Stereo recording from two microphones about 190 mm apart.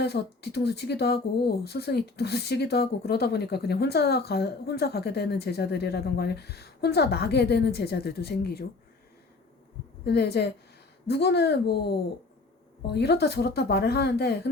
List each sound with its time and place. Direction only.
0.0 s speech: 60° left (ahead or behind)
10.1 s speech: 60° left (ahead or behind)